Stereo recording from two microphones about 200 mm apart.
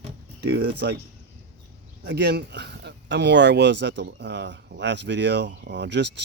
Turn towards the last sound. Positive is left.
turn(degrees=-60)  # may be behind; listen again after turning